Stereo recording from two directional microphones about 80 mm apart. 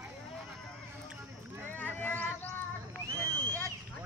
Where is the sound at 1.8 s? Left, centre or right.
Left.